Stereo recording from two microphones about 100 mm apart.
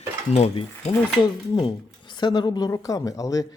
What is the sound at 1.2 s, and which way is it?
Speech, 50° left (ahead or behind).